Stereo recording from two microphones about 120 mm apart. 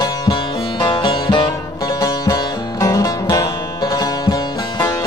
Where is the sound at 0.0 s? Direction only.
35° left (ahead or behind).